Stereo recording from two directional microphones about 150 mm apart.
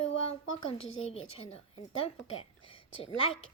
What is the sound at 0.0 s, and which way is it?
A woman's voice, 40° left (ahead or behind).